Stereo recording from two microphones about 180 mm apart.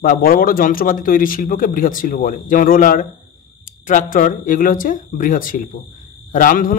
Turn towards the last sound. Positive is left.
turn(degrees=50)  # may be behind; listen again after turning